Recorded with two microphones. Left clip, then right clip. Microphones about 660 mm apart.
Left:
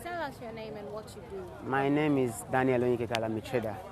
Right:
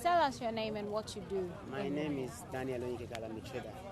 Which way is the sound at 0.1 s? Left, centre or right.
Right.